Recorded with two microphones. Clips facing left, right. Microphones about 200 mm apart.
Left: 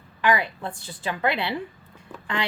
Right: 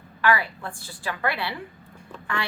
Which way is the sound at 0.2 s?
20° left (ahead or behind).